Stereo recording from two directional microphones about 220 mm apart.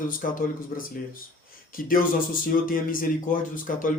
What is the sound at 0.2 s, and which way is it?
Speech, 40° left (ahead or behind).